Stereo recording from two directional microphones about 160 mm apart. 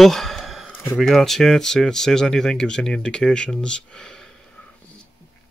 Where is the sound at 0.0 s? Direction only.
Centre (ahead or behind).